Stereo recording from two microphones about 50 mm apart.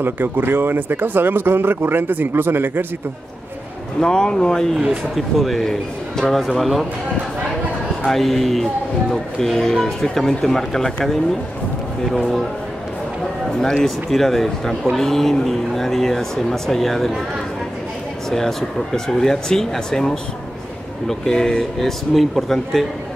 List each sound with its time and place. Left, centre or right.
0.0 s a man's voice: right
4.0 s speech: centre
5.1 s a man's voice: centre
8.1 s a man's voice: centre
12.1 s a man's voice: centre
13.8 s a man's voice: centre
18.3 s speech: centre